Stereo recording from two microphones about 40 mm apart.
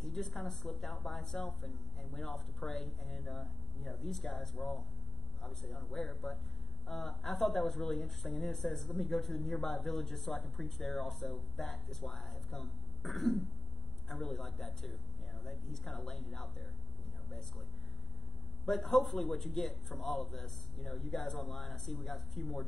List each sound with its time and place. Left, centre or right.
0.0 s speech: centre
4.6 s speech: left
5.4 s speech: centre
18.7 s speech: centre